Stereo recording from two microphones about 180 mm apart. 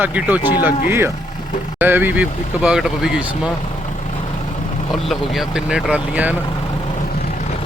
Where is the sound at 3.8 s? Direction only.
40° left (ahead or behind).